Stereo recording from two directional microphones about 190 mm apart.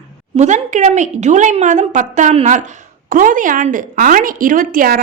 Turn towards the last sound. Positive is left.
turn(degrees=-50)  # may be behind; listen again after turning